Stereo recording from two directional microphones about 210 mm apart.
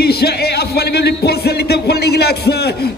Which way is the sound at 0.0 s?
50° left (ahead or behind).